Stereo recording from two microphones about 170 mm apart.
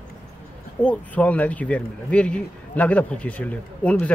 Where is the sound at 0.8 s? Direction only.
5° left (ahead or behind).